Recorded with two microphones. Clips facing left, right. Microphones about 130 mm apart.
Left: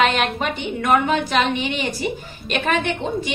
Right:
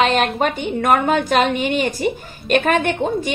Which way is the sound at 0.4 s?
45° right (ahead or behind).